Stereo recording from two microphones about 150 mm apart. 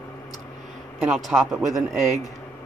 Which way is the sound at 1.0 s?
Centre (ahead or behind).